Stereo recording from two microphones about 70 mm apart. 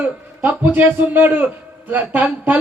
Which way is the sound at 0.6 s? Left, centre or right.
Right.